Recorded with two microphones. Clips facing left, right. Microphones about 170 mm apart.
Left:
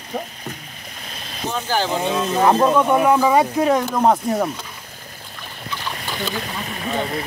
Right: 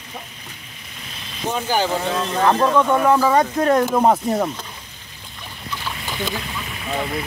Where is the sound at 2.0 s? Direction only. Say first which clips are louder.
Left 2 dB; 15° left (ahead or behind).